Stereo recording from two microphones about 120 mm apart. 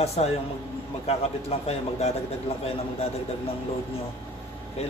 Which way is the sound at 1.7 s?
60° left (ahead or behind).